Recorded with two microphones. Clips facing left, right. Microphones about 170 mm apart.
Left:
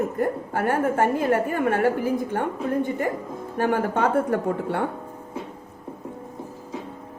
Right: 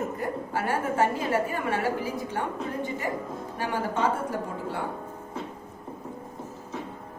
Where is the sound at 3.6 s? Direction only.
55° left (ahead or behind).